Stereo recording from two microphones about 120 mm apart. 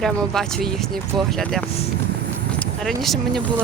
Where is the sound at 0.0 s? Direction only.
Centre (ahead or behind).